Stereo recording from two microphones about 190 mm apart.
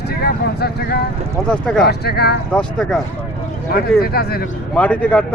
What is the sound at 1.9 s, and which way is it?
Speech, 55° left (ahead or behind).